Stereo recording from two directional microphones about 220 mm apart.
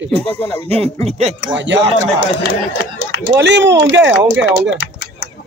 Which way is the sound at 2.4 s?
55° left (ahead or behind).